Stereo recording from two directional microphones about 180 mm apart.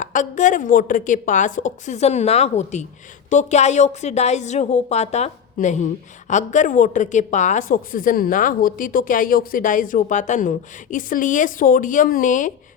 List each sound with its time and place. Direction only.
0.0 s a woman's voice: 45° left (ahead or behind)